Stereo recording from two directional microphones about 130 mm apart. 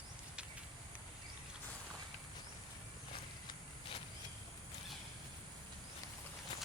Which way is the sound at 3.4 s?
40° left (ahead or behind).